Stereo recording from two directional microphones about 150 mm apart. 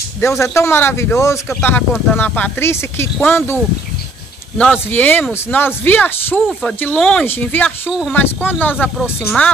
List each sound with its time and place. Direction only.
0.2 s speech: 20° left (ahead or behind)
4.6 s speech: 10° left (ahead or behind)